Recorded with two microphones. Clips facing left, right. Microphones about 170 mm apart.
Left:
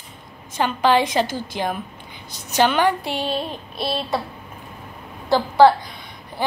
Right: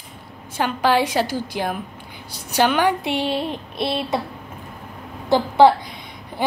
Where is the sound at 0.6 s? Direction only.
10° right (ahead or behind).